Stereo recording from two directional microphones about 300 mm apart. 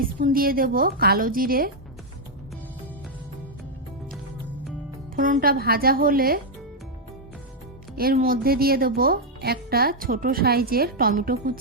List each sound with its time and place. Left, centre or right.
0.0 s speech: right
5.1 s speech: right
7.9 s speech: right